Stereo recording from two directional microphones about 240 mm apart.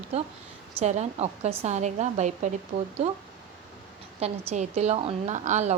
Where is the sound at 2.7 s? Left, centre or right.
Right.